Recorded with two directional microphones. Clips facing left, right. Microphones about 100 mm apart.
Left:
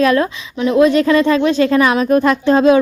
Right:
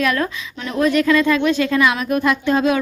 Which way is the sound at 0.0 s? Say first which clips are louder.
Left 6 dB; 25° left (ahead or behind).